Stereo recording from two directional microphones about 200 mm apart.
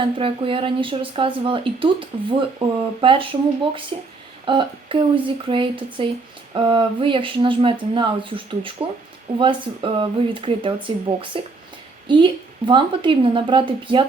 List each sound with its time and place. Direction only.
0.0 s speech: 25° right (ahead or behind)